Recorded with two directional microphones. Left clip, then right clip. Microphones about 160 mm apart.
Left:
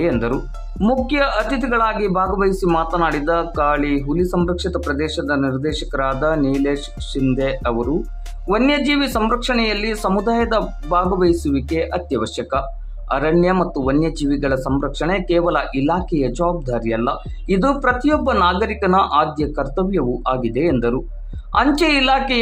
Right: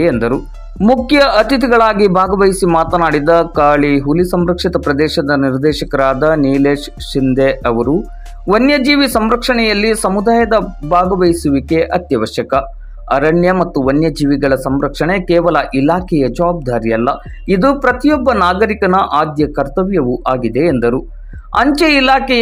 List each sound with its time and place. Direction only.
1.0 s a man's voice: 40° right (ahead or behind); by 22.4 s 25° right (ahead or behind)